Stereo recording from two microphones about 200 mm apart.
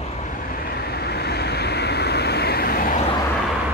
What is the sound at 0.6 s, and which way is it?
Vehicle, 50° left (ahead or behind).